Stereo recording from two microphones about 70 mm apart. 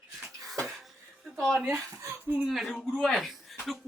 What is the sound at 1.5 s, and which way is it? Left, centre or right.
Speech, right.